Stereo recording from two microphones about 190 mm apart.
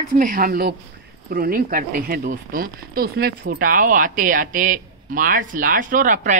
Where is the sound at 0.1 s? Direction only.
45° right (ahead or behind).